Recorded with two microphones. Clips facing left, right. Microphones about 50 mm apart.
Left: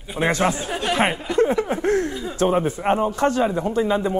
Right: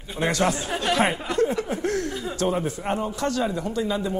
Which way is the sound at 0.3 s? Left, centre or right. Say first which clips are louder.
Left 2 dB; left.